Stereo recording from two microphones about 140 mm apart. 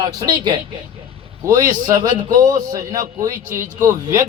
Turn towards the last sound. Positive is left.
turn(degrees=-20)  # may be behind; listen again after turning